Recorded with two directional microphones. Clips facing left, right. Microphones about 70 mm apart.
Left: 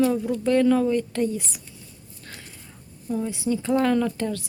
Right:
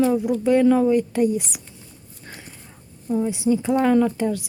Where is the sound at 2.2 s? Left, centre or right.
Centre.